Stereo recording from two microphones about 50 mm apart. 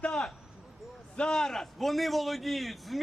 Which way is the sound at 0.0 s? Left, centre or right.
Centre.